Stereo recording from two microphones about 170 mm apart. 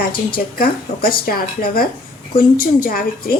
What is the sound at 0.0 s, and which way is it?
A woman's voice, 60° left (ahead or behind).